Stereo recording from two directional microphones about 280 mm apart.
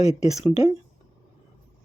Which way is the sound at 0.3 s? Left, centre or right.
Left.